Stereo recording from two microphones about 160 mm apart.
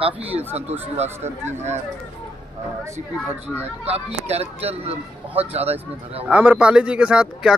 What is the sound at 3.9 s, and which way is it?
Speech, 40° right (ahead or behind).